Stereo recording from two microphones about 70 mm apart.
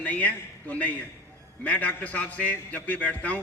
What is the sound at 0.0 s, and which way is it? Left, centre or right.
A man's voice, left.